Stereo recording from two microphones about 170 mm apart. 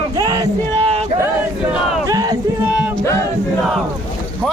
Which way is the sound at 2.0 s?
20° right (ahead or behind).